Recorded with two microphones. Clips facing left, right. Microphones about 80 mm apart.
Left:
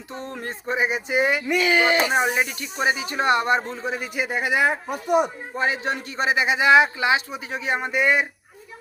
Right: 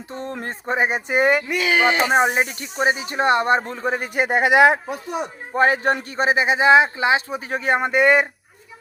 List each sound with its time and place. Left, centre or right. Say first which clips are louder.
0.1 s a man's voice: right 3 dB; right
1.7 s speech: right 4 dB; right
3.7 s a man's voice: right 4 dB; right
5.5 s a man's voice: right 7 dB; right